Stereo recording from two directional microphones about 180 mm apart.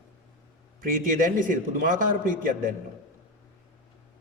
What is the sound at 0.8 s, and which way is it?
A man's voice, 45° right (ahead or behind).